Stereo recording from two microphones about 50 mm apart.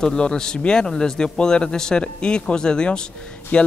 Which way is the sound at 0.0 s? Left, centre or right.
Centre.